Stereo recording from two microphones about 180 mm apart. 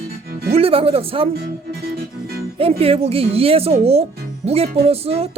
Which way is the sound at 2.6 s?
35° right (ahead or behind).